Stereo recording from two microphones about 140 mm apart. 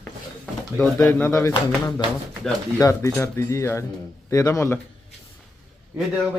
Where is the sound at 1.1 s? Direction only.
10° left (ahead or behind).